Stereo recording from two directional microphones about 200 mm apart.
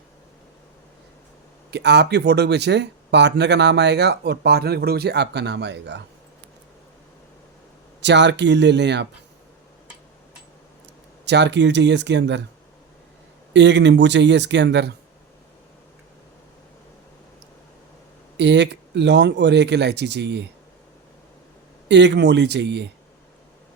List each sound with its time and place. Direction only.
1.7 s speech: 55° right (ahead or behind)
8.0 s speech: 60° right (ahead or behind)
11.3 s speech: 60° right (ahead or behind)
13.5 s speech: 60° right (ahead or behind)
18.3 s speech: 60° right (ahead or behind)
21.8 s speech: 60° right (ahead or behind)